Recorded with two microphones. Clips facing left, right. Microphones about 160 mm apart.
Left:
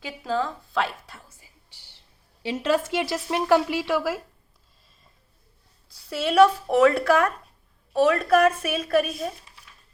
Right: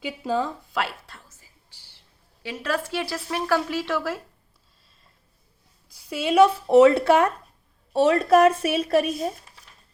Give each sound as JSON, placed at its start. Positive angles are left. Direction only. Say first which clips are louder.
{"t": 0.0, "sound": "speech", "louder": "right 1 dB", "side_deg": -20}
{"t": 0.8, "sound": "a sound", "louder": "left 2 dB", "side_deg": 0}
{"t": 1.3, "sound": "whispering", "louder": "left 1 dB", "side_deg": 15}
{"t": 2.4, "sound": "speech", "louder": "left 4 dB", "side_deg": 25}
{"t": 5.9, "sound": "speech", "louder": "right 1 dB", "side_deg": -15}